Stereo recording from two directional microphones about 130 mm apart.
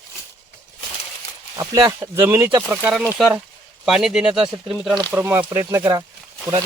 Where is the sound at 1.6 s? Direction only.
30° right (ahead or behind); by 4.9 s 5° right (ahead or behind).